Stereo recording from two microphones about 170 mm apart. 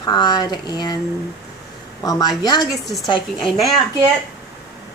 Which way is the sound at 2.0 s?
20° left (ahead or behind).